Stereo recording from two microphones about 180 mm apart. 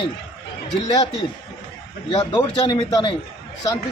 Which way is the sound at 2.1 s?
30° left (ahead or behind).